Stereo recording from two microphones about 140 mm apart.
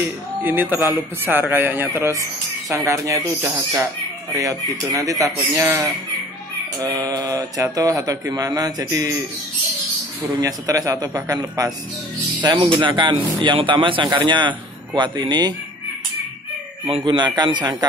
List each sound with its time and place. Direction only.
0.0 s a man's voice: 15° right (ahead or behind)
10.4 s a man's voice: 25° right (ahead or behind)
12.4 s a man's voice: 35° right (ahead or behind)
16.9 s a man's voice: 35° right (ahead or behind)